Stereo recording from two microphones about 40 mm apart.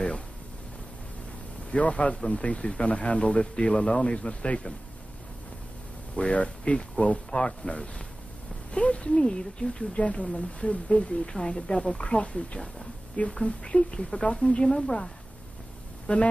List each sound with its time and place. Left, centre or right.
1.7 s speech: left
6.1 s speech: left
16.1 s speech: left